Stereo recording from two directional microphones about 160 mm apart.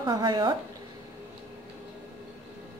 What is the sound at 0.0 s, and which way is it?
Speech, 25° right (ahead or behind).